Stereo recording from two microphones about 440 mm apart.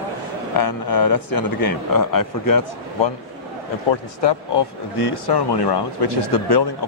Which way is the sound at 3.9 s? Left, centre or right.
Left.